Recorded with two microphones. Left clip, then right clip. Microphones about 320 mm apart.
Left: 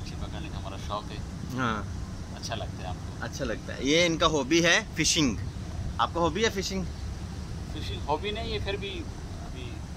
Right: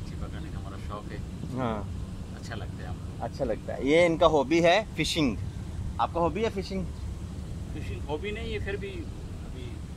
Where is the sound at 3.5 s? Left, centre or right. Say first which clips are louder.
Right 1 dB; right.